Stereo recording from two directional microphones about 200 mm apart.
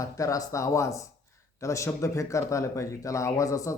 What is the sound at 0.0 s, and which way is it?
Speech, 15° left (ahead or behind).